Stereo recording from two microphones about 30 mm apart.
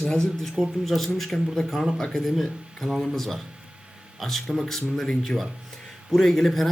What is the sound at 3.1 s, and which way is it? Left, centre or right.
Speech, centre.